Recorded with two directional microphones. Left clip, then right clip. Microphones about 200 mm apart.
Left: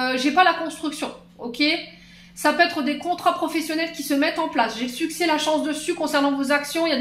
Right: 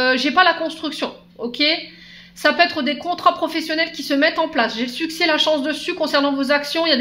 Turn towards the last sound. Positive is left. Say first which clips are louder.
# right 3 dB
turn(degrees=-50)  # may be behind; listen again after turning